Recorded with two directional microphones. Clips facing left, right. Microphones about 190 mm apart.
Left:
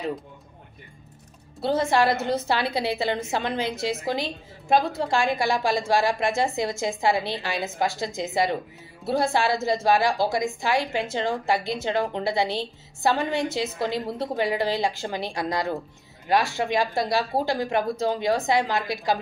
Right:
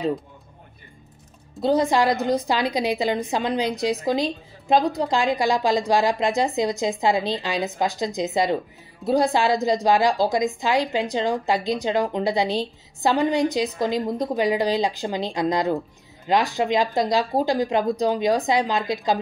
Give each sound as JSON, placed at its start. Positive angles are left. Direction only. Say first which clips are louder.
{"t": 1.6, "sound": "a woman's voice", "louder": "right 2 dB", "side_deg": -15}